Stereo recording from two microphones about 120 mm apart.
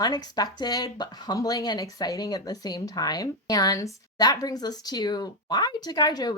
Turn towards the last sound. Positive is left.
turn(degrees=35)  # may be behind; listen again after turning